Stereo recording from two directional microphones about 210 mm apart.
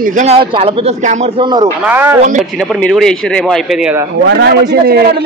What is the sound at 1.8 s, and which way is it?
Speech, 10° right (ahead or behind).